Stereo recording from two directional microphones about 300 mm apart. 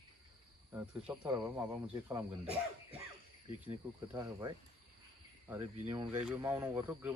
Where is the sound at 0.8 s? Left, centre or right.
Centre.